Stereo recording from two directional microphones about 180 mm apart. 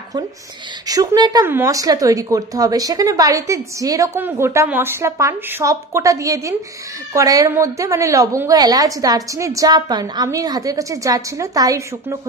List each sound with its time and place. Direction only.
0.8 s speech: 20° right (ahead or behind)